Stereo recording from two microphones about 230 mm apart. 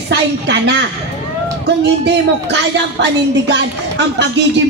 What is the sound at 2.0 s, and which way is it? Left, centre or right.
A woman's voice, right.